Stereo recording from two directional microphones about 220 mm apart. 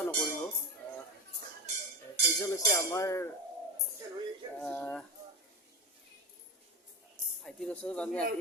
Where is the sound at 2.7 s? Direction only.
15° left (ahead or behind).